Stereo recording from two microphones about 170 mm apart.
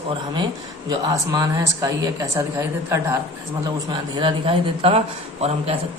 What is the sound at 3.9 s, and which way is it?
A man's voice, 30° right (ahead or behind).